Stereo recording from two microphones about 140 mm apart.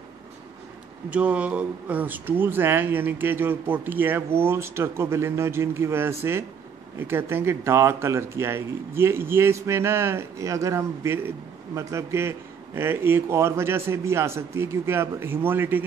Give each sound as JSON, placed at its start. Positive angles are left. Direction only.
{"t": 1.1, "sound": "speech", "side_deg": -10}